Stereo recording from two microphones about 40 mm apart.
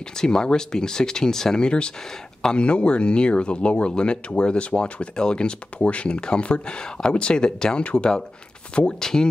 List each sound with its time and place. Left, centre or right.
0.2 s speech: centre
7.8 s speech: left
9.0 s speech: centre